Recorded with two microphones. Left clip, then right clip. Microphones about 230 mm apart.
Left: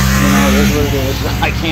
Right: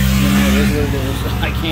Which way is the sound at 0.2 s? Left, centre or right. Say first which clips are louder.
Left 4 dB; left.